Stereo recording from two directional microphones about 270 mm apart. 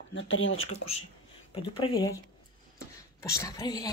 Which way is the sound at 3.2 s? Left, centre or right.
Centre.